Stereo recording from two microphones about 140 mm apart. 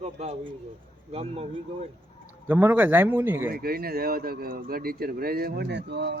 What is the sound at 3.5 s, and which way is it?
Speech, 90° right.